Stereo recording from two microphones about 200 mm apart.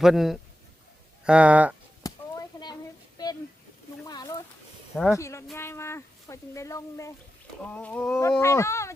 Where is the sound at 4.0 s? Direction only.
20° left (ahead or behind).